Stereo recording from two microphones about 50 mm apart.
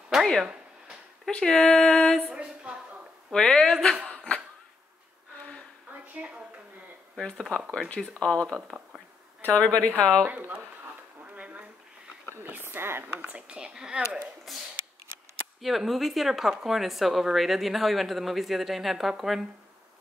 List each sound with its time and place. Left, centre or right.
0.1 s a sound: centre
1.4 s music: centre
2.3 s speech: right
3.3 s music: centre
6.2 s speech: right
7.2 s music: centre
7.9 s a woman's voice: left
10.2 s speech: right
11.3 s a sound: right
12.4 s speech: right
13.2 s speech: right
14.5 s speech: centre